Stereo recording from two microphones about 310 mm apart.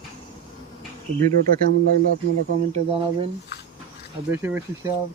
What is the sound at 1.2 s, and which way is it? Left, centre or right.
Speech, right.